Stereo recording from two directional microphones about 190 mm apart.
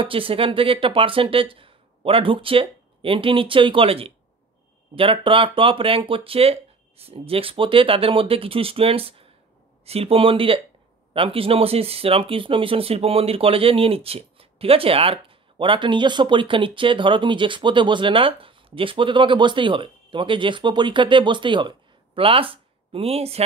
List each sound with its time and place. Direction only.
0.0 s speech: 30° right (ahead or behind)